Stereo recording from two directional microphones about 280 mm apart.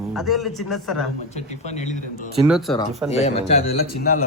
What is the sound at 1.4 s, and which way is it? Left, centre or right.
Speech, left.